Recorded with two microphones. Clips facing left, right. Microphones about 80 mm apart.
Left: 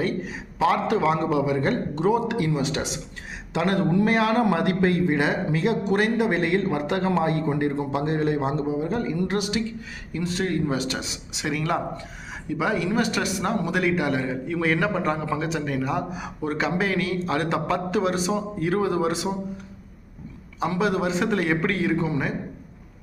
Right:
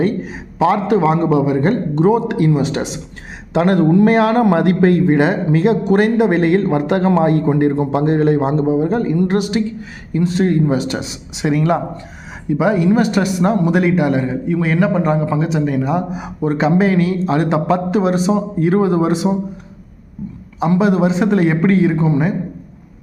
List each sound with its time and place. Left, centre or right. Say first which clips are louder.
0.0 s a man's voice: right 8 dB; right
20.6 s a man's voice: right 9 dB; centre